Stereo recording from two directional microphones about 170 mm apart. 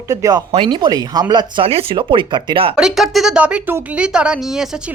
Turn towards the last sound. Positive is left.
turn(degrees=-5)  # may be behind; listen again after turning